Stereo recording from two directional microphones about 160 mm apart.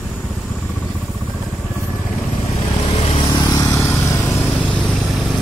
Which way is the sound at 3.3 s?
25° left (ahead or behind).